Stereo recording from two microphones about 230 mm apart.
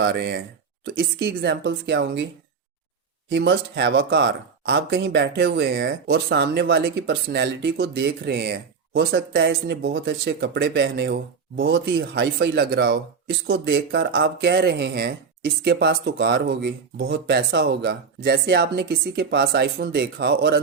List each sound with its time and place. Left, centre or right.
0.0 s speech: right
3.2 s speech: right